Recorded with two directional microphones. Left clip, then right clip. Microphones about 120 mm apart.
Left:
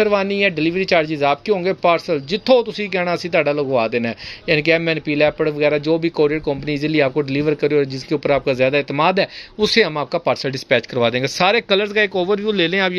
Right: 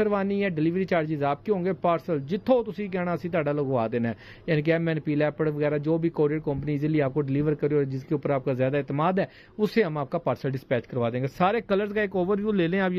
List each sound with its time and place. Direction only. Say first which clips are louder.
0.0 s a man's voice: left 9 dB; 15° left (ahead or behind)
3.4 s a man's voice: left 8 dB; 15° left (ahead or behind)
10.7 s a man's voice: left 11 dB; 40° left (ahead or behind); by 12.9 s 10° left (ahead or behind)